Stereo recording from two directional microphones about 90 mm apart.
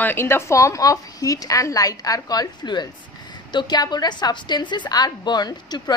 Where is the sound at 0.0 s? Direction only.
25° left (ahead or behind).